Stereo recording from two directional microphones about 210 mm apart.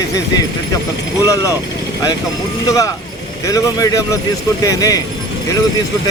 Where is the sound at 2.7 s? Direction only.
15° left (ahead or behind).